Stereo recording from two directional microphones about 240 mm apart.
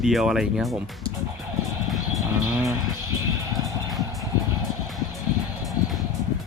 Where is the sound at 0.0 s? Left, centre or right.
Centre.